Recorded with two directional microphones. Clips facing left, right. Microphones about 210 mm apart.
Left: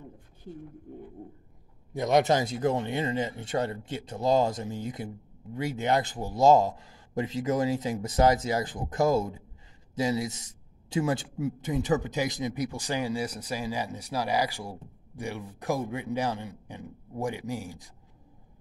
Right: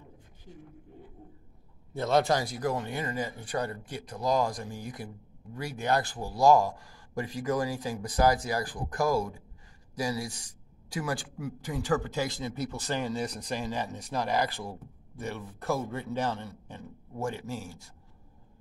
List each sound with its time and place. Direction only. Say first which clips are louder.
2.0 s a man's voice: left 2 dB; 15° left (ahead or behind)